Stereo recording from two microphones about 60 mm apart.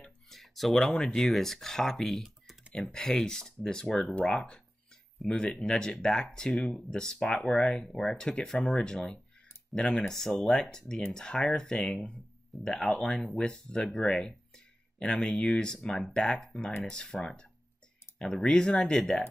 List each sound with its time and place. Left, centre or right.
0.3 s a sound: centre
0.8 s speech: centre
2.2 s typing: centre
2.7 s speech: centre
4.0 s speech: left